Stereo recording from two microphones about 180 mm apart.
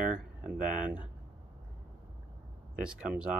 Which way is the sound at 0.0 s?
5° right (ahead or behind).